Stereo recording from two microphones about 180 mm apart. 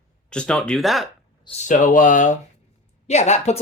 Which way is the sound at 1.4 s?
40° left (ahead or behind).